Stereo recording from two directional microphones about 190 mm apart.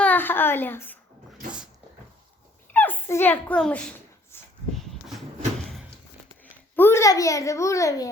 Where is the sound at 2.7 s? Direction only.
10° left (ahead or behind).